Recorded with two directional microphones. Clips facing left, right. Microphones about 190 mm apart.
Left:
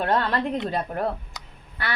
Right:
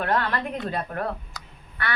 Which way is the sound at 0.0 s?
25° left (ahead or behind).